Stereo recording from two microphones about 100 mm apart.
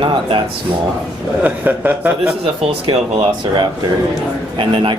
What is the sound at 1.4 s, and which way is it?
Speech, 15° right (ahead or behind).